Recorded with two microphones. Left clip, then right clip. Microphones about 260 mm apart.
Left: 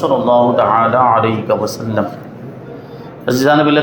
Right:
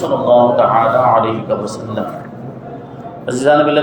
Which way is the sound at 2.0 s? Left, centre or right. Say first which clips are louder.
Left 4 dB; left.